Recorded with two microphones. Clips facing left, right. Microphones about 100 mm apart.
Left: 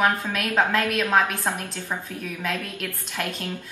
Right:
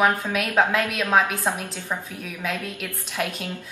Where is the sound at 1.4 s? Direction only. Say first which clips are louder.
Right 1 dB; 15° right (ahead or behind).